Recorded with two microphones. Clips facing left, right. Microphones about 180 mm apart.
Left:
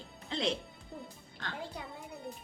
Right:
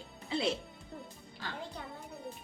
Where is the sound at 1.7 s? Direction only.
Centre (ahead or behind).